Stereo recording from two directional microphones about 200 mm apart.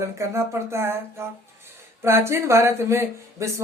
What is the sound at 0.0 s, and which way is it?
Speech, 15° right (ahead or behind).